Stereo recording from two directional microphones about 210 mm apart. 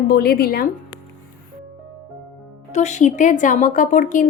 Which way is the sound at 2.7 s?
35° left (ahead or behind).